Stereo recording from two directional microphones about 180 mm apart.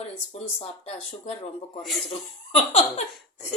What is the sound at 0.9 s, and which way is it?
Speech, 35° left (ahead or behind).